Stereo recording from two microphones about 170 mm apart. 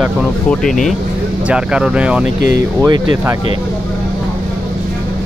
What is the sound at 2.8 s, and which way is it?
Speech, 15° right (ahead or behind).